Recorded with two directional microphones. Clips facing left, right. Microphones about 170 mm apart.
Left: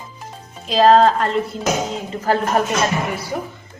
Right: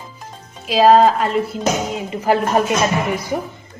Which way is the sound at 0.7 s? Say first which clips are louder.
Right 1 dB; 5° right (ahead or behind).